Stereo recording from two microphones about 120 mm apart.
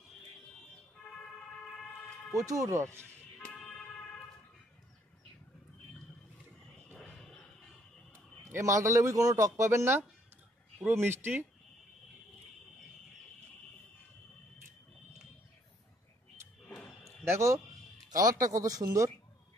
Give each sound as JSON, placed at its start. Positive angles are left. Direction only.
{"t": 1.8, "sound": "vehicle", "side_deg": 10}
{"t": 2.3, "sound": "speech", "side_deg": -25}
{"t": 3.3, "sound": "vehicle", "side_deg": 10}
{"t": 6.9, "sound": "a sound", "side_deg": 10}
{"t": 8.5, "sound": "speech", "side_deg": -25}
{"t": 16.6, "sound": "a sound", "side_deg": 10}
{"t": 17.2, "sound": "speech", "side_deg": -25}